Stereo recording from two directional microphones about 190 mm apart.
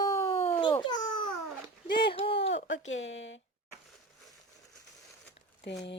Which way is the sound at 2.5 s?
75° left (ahead or behind).